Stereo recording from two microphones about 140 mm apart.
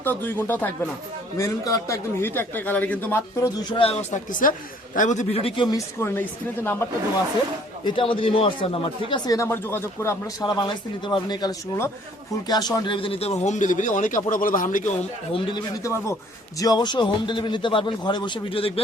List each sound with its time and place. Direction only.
0.0 s a man's voice: 15° left (ahead or behind)
1.4 s a man's voice: 25° left (ahead or behind)
3.8 s speech: 65° left (ahead or behind)
4.9 s a man's voice: 60° left (ahead or behind); by 5.8 s 35° left (ahead or behind)
6.0 s a man's voice: 15° left (ahead or behind)
7.9 s speech: 40° left (ahead or behind)
9.5 s a man's voice: 15° left (ahead or behind)
10.4 s a man's voice: 30° left (ahead or behind); by 14.9 s 75° left (ahead or behind)
15.3 s speech: 35° left (ahead or behind)